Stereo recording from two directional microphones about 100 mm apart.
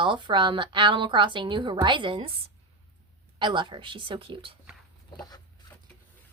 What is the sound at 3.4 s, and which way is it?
Speech, 50° right (ahead or behind).